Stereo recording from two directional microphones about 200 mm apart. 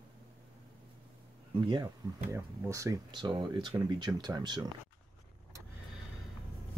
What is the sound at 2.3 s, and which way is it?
Speech, 15° right (ahead or behind).